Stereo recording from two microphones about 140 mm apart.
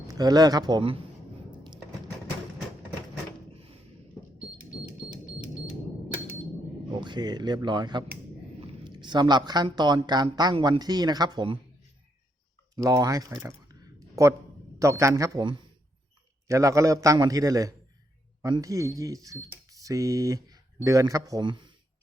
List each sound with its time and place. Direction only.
0.1 s a man's voice: 30° right (ahead or behind)
6.9 s speech: 35° right (ahead or behind)
12.7 s a man's voice: 25° right (ahead or behind)
16.5 s a man's voice: 20° right (ahead or behind)